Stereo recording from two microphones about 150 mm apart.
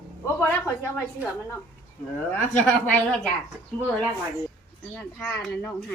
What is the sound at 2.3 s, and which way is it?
A woman's voice, 10° left (ahead or behind).